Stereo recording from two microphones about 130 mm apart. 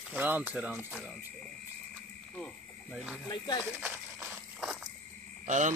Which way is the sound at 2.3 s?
5° left (ahead or behind).